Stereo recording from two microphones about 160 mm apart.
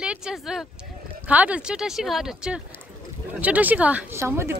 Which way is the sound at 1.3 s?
10° right (ahead or behind).